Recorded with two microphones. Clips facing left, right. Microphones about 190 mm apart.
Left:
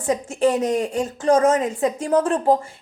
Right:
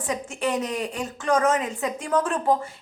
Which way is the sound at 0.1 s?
35° left (ahead or behind).